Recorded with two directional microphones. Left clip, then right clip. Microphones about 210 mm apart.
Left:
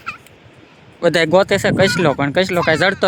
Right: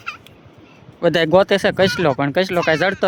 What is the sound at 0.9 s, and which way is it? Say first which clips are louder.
Speech: left 1 dB; centre (ahead or behind).